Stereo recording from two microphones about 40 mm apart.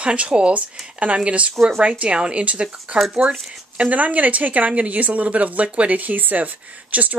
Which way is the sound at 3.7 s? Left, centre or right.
Right.